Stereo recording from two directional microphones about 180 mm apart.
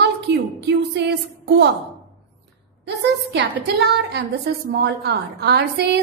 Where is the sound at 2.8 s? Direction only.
70° right (ahead or behind).